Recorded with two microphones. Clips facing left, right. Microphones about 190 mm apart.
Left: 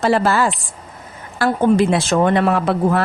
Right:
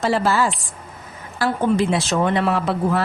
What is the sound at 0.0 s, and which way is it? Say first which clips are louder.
Speech: left 3 dB; 55° left (ahead or behind).